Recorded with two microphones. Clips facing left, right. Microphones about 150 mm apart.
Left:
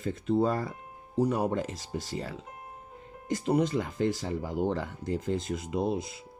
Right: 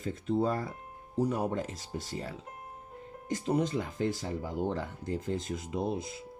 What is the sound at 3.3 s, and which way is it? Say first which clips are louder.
Speech: left 3 dB; 70° left (ahead or behind).